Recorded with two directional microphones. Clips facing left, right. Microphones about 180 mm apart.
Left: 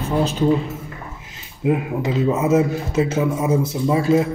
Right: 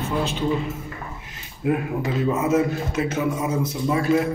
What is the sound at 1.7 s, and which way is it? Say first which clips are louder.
A man's voice: left 3 dB; 20° left (ahead or behind).